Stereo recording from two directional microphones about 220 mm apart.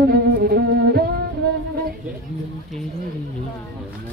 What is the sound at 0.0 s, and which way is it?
Music, 45° right (ahead or behind).